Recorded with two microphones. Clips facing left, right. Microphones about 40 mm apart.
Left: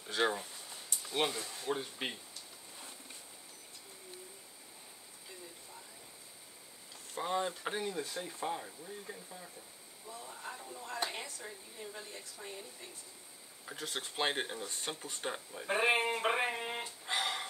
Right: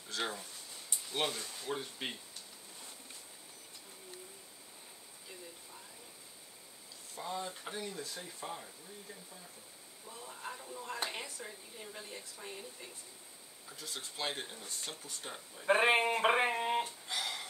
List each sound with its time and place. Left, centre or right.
0.0 s speech: left
1.0 s speech: centre
7.2 s speech: left
7.9 s speech: left
10.0 s speech: centre
12.4 s a sound: centre
13.7 s speech: left
15.6 s speech: right
16.1 s a sound: right
17.0 s a sound: left